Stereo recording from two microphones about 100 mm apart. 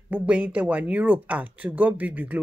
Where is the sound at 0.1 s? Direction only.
10° right (ahead or behind).